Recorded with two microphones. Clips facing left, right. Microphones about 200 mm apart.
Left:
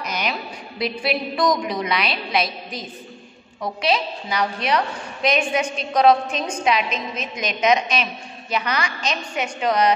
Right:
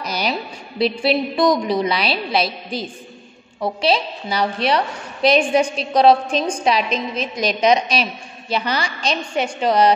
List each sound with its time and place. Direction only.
0.0 s a woman's voice: 35° right (ahead or behind)